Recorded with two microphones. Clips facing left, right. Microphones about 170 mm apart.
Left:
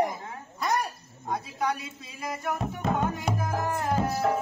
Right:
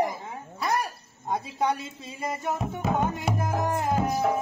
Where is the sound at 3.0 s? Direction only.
25° right (ahead or behind).